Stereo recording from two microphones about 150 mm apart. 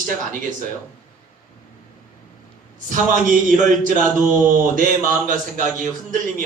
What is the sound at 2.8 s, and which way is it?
Speech, 60° right (ahead or behind).